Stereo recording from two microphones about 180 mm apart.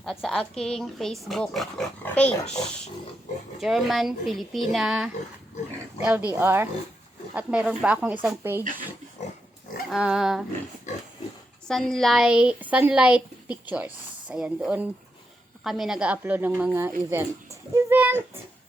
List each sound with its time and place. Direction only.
0.0 s speech: centre (ahead or behind)
3.6 s a woman's voice: centre (ahead or behind)
9.9 s speech: 5° right (ahead or behind)
11.7 s a woman's voice: centre (ahead or behind)